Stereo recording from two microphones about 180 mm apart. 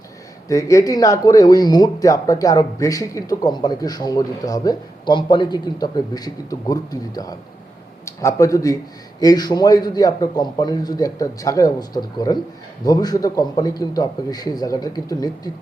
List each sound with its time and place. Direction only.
0.4 s speech: 20° left (ahead or behind)